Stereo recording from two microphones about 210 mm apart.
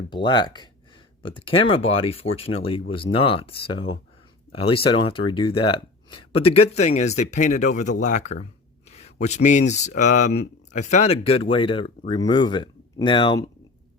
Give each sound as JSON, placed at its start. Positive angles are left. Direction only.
{"t": 0.1, "sound": "speech", "side_deg": 20}